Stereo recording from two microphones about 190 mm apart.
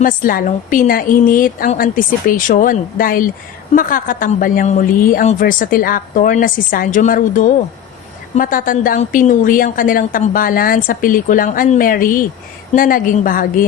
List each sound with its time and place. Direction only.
0.0 s a woman's voice: 45° left (ahead or behind)